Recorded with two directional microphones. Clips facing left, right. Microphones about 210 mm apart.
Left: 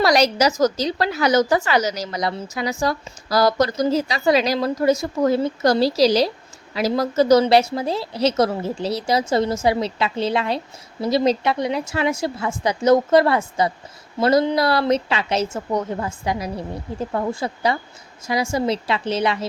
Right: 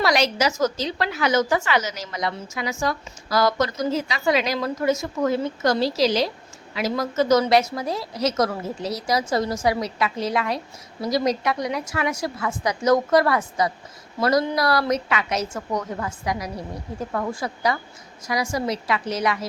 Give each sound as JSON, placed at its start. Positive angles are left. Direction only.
{"t": 0.0, "sound": "a woman's voice", "side_deg": 40}